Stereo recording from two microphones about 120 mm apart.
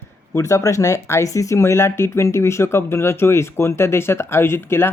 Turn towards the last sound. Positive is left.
turn(degrees=20)  # may be behind; listen again after turning